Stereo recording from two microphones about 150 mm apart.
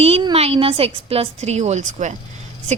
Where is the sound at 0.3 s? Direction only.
40° right (ahead or behind).